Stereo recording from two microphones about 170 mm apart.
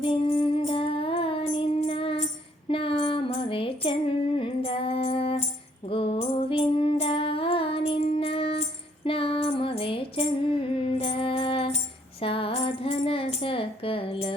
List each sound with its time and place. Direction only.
0.0 s music: 30° left (ahead or behind)
2.6 s a sound: 35° left (ahead or behind)
4.4 s music: 30° left (ahead or behind)